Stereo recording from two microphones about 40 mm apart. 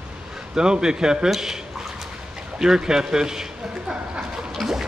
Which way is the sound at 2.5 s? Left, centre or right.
Centre.